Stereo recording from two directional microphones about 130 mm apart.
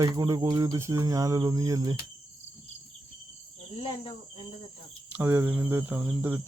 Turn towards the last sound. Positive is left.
turn(degrees=-15)  # may be behind; listen again after turning